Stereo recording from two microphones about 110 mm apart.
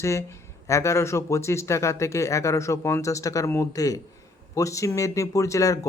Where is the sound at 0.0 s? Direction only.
25° left (ahead or behind).